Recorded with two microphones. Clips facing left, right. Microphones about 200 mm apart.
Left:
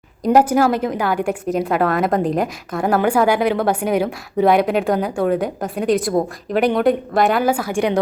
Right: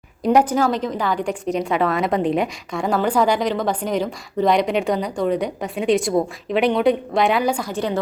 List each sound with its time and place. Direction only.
0.3 s a woman's voice: 10° left (ahead or behind)
2.8 s a woman's voice: 60° left (ahead or behind)
3.1 s a woman's voice: 10° left (ahead or behind)